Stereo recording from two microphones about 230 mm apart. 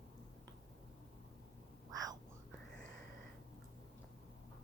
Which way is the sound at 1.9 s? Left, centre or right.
Centre.